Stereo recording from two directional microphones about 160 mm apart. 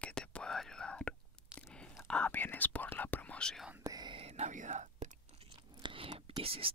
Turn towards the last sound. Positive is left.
turn(degrees=-35)  # may be behind; listen again after turning